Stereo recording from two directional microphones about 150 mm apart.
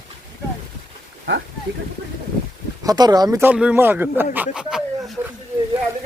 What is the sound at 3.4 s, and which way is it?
Speech, 10° right (ahead or behind).